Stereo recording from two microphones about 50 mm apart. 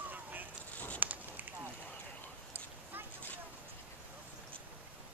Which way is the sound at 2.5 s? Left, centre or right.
Right.